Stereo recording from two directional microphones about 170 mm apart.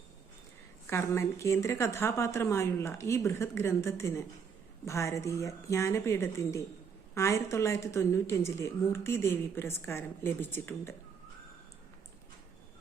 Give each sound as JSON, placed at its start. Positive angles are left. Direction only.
{"t": 0.9, "sound": "a woman's voice", "side_deg": 15}